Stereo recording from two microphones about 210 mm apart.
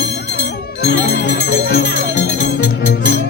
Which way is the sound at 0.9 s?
50° left (ahead or behind).